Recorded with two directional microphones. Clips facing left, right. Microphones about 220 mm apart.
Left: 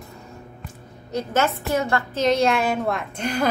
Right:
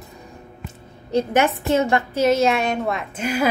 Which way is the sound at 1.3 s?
20° right (ahead or behind).